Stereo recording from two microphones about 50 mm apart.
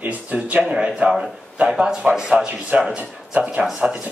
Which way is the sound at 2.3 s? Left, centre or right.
Right.